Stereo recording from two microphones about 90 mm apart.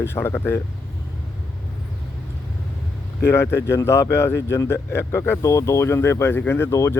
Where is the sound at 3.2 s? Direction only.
30° left (ahead or behind).